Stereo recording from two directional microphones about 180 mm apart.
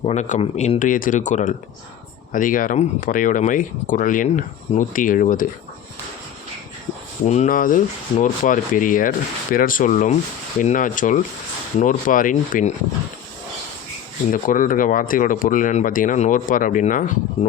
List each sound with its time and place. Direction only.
0.0 s speech: 40° left (ahead or behind)
7.3 s speech: 40° left (ahead or behind)
14.3 s speech: 45° left (ahead or behind)